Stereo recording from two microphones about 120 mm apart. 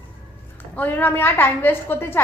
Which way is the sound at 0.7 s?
15° left (ahead or behind).